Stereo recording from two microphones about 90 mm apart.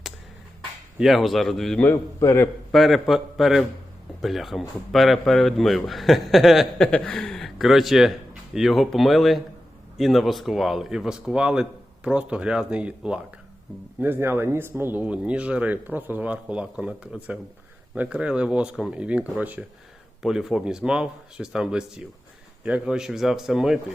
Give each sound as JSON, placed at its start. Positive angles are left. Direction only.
{"t": 0.9, "sound": "a man's voice", "side_deg": 0}
{"t": 2.2, "sound": "a man's voice", "side_deg": 25}
{"t": 2.7, "sound": "a man's voice", "side_deg": 0}
{"t": 6.8, "sound": "a man's voice", "side_deg": 10}
{"t": 14.0, "sound": "speech", "side_deg": -25}
{"t": 20.2, "sound": "a man's voice", "side_deg": -5}